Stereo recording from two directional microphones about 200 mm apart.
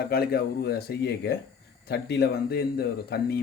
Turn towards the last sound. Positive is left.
turn(degrees=55)  # may be behind; listen again after turning